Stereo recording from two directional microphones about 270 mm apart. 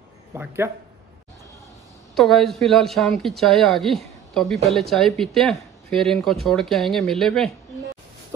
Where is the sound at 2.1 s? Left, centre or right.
Centre.